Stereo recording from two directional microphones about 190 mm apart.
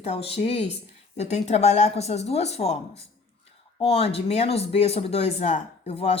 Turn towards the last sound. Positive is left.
turn(degrees=30)  # may be behind; listen again after turning